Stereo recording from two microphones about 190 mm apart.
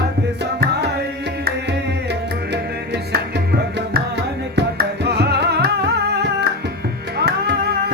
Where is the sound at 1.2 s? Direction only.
65° right (ahead or behind).